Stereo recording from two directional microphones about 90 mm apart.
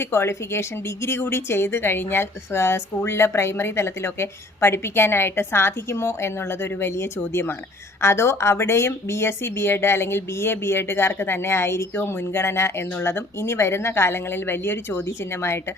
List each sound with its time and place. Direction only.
0.0 s speech: 30° left (ahead or behind)